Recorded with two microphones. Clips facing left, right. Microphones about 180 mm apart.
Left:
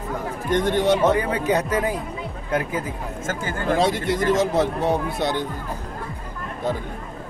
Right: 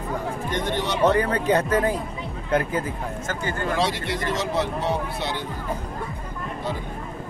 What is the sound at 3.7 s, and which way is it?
Speech, 45° left (ahead or behind).